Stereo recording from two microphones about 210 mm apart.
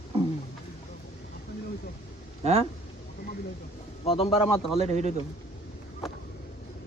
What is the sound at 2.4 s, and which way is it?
Speech, 30° right (ahead or behind).